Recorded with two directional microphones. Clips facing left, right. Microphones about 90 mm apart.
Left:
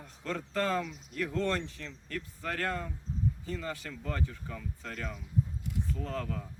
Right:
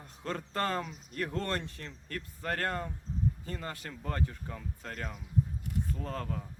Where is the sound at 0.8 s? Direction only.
40° right (ahead or behind).